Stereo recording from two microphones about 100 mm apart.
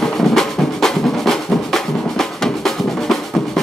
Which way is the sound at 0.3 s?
5° left (ahead or behind).